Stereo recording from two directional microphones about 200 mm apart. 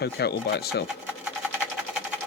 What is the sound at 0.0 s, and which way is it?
Speech, 55° left (ahead or behind).